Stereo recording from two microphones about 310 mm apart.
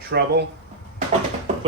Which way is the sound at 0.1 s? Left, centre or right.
Right.